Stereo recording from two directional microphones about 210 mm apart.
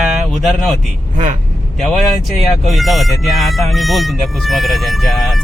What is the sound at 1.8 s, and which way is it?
Speech, centre (ahead or behind).